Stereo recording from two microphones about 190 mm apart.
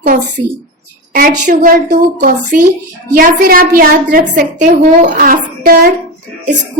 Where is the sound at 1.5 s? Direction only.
45° right (ahead or behind).